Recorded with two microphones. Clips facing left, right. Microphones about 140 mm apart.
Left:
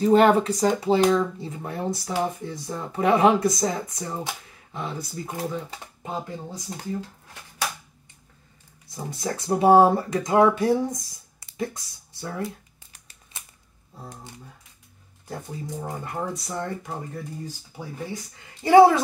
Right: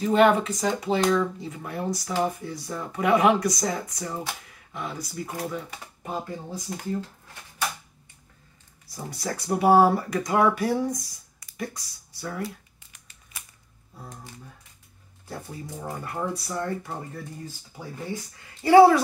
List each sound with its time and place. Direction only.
0.0 s speech: 35° left (ahead or behind)
8.8 s speech: 20° left (ahead or behind)
15.2 s speech: 20° left (ahead or behind)
18.6 s speech: 20° left (ahead or behind)